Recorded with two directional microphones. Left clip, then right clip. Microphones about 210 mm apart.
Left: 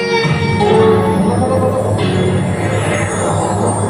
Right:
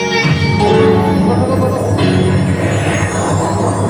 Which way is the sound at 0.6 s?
50° right (ahead or behind).